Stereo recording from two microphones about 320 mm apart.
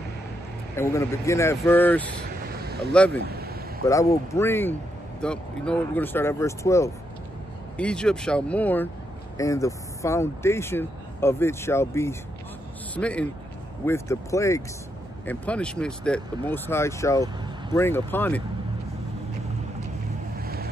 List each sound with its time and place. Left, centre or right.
0.7 s speech: centre
3.2 s a sound: right
3.8 s speech: centre
20.3 s vehicle: right